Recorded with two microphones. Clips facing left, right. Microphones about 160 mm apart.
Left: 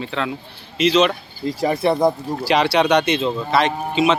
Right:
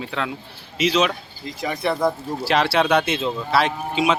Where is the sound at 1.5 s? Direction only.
35° left (ahead or behind).